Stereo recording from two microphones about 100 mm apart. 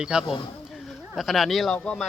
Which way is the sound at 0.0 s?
10° right (ahead or behind).